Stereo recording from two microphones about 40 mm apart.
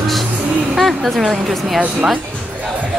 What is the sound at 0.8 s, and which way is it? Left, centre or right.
Speech, centre.